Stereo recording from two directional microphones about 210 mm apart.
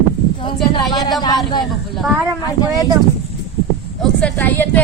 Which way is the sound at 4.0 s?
5° left (ahead or behind).